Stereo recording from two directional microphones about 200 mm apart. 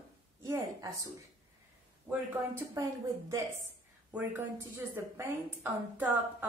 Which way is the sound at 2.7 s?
15° right (ahead or behind).